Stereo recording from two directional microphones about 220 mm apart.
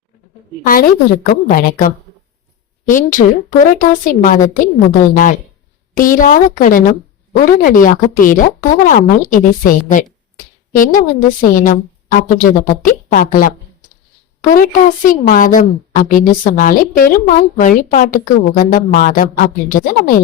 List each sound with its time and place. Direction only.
0.6 s a woman's voice: 40° left (ahead or behind)
2.9 s a woman's voice: 35° left (ahead or behind)